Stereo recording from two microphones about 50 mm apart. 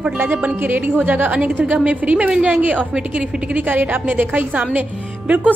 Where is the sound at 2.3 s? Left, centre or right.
Centre.